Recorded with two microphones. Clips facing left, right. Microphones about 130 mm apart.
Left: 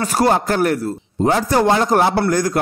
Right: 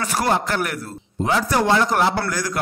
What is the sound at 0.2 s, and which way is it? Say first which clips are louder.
A man's voice: left 6 dB; 40° left (ahead or behind).